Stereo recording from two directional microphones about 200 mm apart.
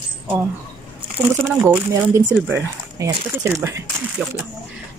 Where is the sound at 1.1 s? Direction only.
10° right (ahead or behind).